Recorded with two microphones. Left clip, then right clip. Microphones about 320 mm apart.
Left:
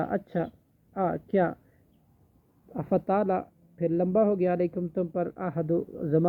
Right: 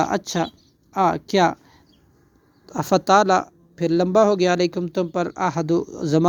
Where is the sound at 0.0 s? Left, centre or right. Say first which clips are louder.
Right 8 dB; right.